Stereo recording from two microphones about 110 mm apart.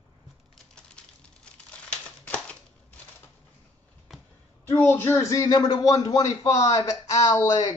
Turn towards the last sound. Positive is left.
turn(degrees=35)  # may be behind; listen again after turning